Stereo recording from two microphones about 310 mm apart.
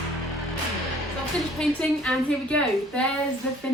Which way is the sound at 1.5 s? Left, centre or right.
Centre.